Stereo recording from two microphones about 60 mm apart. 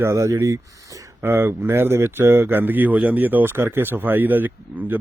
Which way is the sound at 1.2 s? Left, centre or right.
Right.